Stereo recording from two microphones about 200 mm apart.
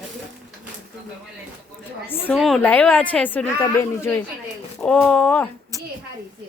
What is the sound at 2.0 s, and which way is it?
A woman's voice, 10° left (ahead or behind).